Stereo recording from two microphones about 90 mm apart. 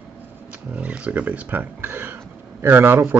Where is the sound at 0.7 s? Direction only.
15° right (ahead or behind).